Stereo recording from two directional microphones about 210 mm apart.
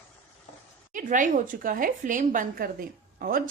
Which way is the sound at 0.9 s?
40° right (ahead or behind).